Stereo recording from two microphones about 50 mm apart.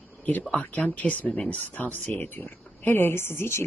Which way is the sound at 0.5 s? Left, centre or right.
Left.